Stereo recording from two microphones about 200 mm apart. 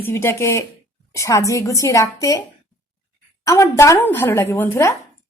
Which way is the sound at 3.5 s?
15° left (ahead or behind).